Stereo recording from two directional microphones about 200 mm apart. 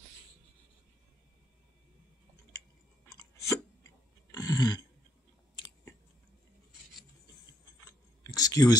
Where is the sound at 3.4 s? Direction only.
15° left (ahead or behind).